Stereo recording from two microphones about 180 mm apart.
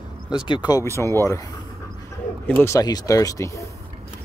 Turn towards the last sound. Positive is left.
turn(degrees=15)  # may be behind; listen again after turning